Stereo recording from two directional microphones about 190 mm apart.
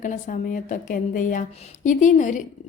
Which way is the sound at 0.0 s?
45° left (ahead or behind).